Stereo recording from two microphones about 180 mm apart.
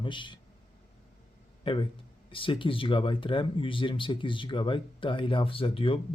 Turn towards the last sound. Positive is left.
turn(degrees=30)  # may be behind; listen again after turning